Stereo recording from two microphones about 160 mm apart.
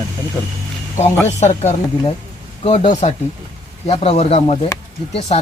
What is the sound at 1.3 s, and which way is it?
Speech, 45° left (ahead or behind).